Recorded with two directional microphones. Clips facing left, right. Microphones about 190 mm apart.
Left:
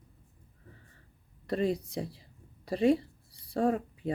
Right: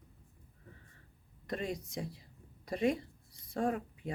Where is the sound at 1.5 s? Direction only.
35° left (ahead or behind).